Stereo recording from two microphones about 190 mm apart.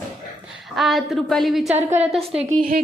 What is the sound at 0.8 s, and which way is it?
A woman's voice, centre (ahead or behind).